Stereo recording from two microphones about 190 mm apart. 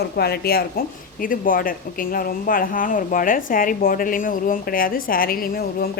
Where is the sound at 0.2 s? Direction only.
55° left (ahead or behind).